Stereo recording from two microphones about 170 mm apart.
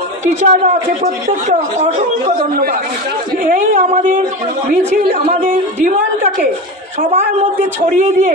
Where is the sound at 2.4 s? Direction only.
60° right (ahead or behind).